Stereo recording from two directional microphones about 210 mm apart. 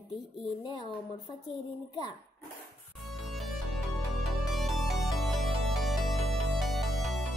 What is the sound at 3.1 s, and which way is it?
Music, centre (ahead or behind).